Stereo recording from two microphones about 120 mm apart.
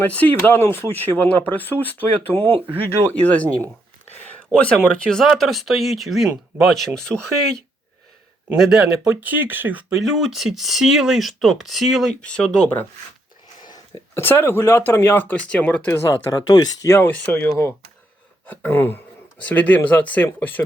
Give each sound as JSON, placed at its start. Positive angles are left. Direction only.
{"t": 0.0, "sound": "speech", "side_deg": 15}
{"t": 4.3, "sound": "a sound", "side_deg": 10}
{"t": 4.9, "sound": "speech", "side_deg": 5}
{"t": 10.0, "sound": "speech", "side_deg": 0}
{"t": 14.2, "sound": "speech", "side_deg": 15}
{"t": 16.3, "sound": "speech", "side_deg": 35}
{"t": 16.9, "sound": "speech", "side_deg": 15}